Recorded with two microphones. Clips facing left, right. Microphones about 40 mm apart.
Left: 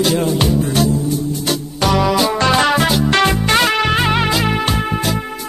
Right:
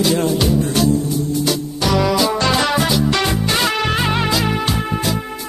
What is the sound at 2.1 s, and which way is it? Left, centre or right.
Music, left.